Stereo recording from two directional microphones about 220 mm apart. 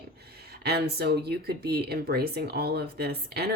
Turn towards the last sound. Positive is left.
turn(degrees=-45)  # may be behind; listen again after turning